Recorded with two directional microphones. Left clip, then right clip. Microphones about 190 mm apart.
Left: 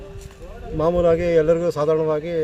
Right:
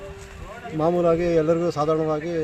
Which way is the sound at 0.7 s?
Centre (ahead or behind).